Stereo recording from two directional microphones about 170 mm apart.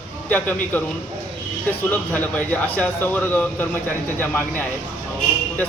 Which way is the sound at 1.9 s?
10° left (ahead or behind).